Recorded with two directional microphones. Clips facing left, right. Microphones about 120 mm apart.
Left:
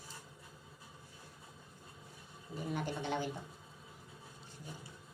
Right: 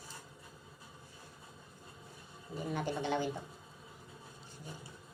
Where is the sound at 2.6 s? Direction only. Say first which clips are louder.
Right 2 dB; centre (ahead or behind).